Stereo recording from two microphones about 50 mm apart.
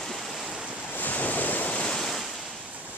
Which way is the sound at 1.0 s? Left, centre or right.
Left.